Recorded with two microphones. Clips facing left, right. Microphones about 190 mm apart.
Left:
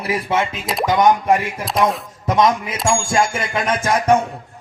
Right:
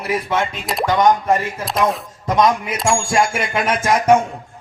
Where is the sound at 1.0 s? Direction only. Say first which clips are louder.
Left 1 dB; 10° left (ahead or behind).